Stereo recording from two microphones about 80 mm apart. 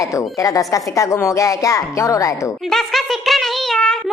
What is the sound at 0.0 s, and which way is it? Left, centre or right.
A woman's voice, left.